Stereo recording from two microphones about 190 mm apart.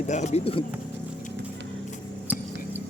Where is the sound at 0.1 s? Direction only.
35° left (ahead or behind).